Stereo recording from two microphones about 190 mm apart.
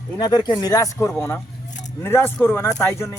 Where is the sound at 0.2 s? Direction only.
20° left (ahead or behind).